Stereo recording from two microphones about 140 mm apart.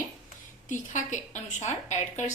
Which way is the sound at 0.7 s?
60° left (ahead or behind).